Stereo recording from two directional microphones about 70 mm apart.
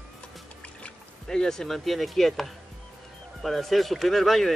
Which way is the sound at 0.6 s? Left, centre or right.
Centre.